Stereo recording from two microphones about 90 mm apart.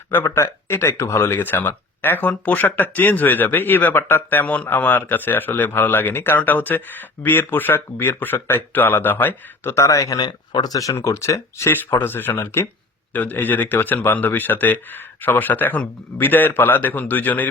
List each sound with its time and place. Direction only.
0.1 s speech: 30° left (ahead or behind)
10.2 s speech: 50° left (ahead or behind); by 17.4 s 20° left (ahead or behind)